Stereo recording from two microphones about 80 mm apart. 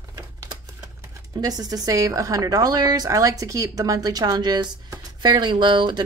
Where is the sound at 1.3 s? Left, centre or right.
Right.